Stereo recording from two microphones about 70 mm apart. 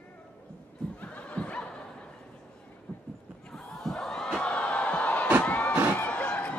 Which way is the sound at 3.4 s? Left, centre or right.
Centre.